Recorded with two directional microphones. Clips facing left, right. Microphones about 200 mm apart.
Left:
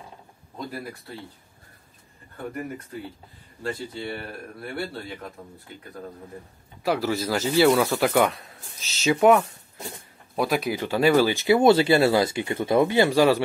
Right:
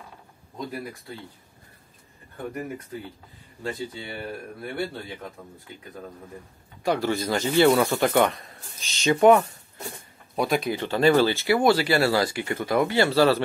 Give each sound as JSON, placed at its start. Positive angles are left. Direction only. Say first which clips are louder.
{"t": 6.8, "sound": "speech", "louder": "even", "side_deg": 5}